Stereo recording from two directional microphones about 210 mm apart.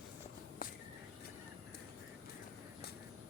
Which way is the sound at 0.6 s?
45° left (ahead or behind).